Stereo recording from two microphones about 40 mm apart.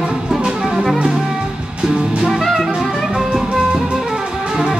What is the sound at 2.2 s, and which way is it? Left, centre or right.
Jazz, centre.